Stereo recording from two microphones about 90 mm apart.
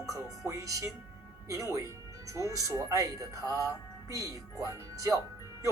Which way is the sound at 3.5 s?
40° right (ahead or behind).